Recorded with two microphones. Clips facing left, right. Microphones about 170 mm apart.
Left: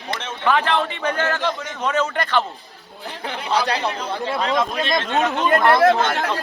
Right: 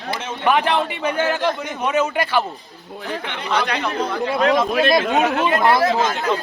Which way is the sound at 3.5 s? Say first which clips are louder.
Even; 35° left (ahead or behind).